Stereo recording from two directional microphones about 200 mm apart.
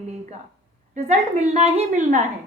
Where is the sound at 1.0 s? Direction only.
35° right (ahead or behind).